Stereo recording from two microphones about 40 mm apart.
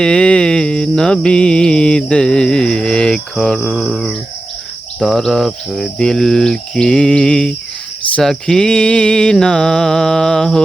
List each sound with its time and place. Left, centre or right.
0.0 s music: left
3.7 s a sound: centre
3.9 s bird: centre
5.3 s music: centre